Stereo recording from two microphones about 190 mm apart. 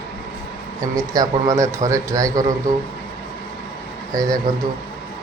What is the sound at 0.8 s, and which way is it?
A man's voice, 20° right (ahead or behind).